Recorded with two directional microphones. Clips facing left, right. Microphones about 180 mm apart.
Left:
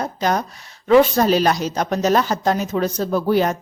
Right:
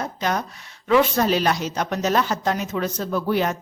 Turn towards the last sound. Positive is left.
turn(degrees=35)  # may be behind; listen again after turning